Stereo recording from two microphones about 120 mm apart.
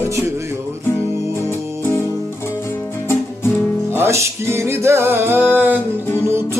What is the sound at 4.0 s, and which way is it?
Music, 20° right (ahead or behind).